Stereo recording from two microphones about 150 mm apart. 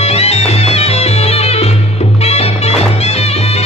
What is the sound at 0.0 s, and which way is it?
Music, 45° left (ahead or behind).